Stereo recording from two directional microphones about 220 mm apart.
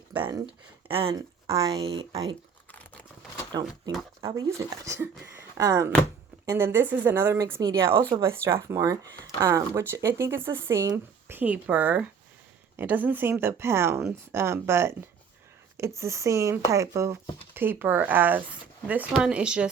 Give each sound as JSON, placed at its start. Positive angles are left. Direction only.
{"t": 0.2, "sound": "speech", "side_deg": -15}
{"t": 3.5, "sound": "speech", "side_deg": -20}
{"t": 16.0, "sound": "speech", "side_deg": -15}